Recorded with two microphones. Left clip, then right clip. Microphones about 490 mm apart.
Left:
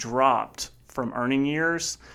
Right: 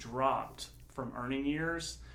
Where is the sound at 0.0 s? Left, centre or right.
Left.